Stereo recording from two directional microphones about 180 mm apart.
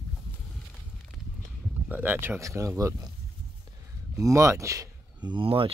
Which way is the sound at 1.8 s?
10° right (ahead or behind).